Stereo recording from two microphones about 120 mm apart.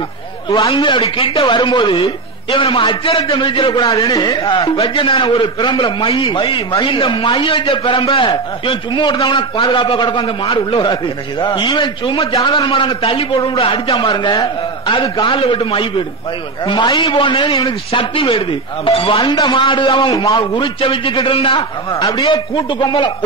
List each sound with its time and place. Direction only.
0.5 s a man's voice: 40° left (ahead or behind)
4.6 s a man's voice: 50° left (ahead or behind)
10.8 s a man's voice: 40° left (ahead or behind)
12.4 s a man's voice: 35° left (ahead or behind)